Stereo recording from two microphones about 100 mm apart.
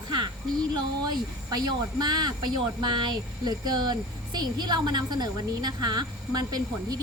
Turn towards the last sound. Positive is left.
turn(degrees=-40)  # may be behind; listen again after turning